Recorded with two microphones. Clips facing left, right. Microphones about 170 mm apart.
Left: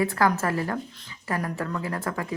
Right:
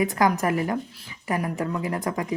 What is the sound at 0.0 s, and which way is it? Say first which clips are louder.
Speech: right 1 dB; 15° right (ahead or behind).